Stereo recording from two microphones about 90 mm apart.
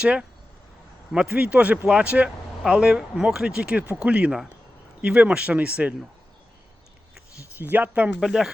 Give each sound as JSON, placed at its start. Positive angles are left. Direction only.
{"t": 0.0, "sound": "speech", "side_deg": -10}
{"t": 7.6, "sound": "speech", "side_deg": -20}